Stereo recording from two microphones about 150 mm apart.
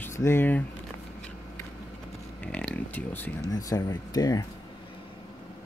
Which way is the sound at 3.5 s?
25° left (ahead or behind).